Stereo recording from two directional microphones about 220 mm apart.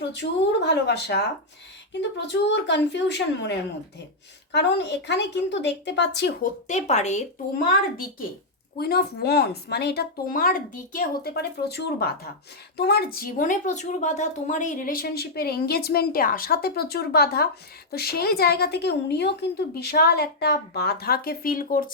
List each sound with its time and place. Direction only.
0.1 s a woman's voice: 50° left (ahead or behind)
6.7 s a woman's voice: 30° left (ahead or behind)
8.8 s a woman's voice: 45° left (ahead or behind)